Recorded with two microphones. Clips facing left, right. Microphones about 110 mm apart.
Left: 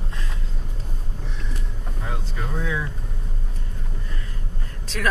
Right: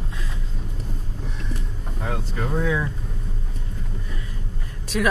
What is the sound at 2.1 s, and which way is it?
Speech, 50° right (ahead or behind).